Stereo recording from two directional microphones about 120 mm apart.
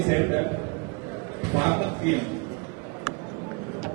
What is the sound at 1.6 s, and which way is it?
Speech, 20° right (ahead or behind).